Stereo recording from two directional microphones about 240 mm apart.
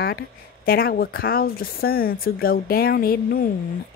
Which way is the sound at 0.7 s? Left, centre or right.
Left.